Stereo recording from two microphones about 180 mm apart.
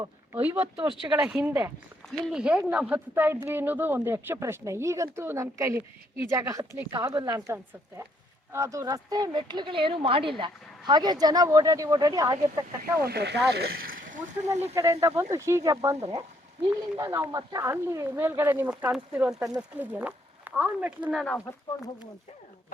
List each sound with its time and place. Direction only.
0.3 s speech: 10° right (ahead or behind)
13.0 s speech: 65° right (ahead or behind)
14.1 s speech: 40° right (ahead or behind)
14.8 s speech: 15° right (ahead or behind)
21.1 s speech: centre (ahead or behind)
21.3 s speech: 20° left (ahead or behind)